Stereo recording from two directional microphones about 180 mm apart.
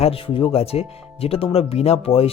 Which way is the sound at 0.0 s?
30° left (ahead or behind).